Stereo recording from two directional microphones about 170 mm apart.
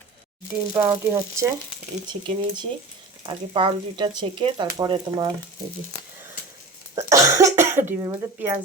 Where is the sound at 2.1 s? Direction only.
25° right (ahead or behind).